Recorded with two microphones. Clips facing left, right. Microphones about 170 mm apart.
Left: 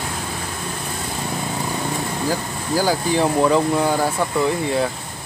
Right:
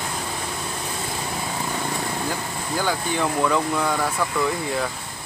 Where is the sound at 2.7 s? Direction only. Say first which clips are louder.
Left 6 dB; 35° left (ahead or behind).